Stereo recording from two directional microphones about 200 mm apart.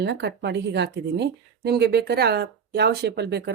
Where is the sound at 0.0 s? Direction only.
60° right (ahead or behind).